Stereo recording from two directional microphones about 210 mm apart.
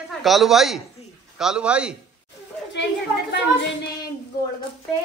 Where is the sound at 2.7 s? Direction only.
55° left (ahead or behind).